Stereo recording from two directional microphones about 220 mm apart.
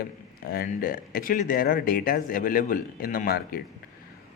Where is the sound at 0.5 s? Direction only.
40° left (ahead or behind).